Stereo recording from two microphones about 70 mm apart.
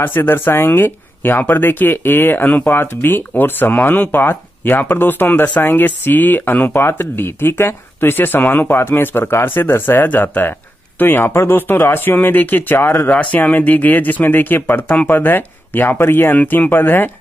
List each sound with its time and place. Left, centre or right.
0.0 s speech: left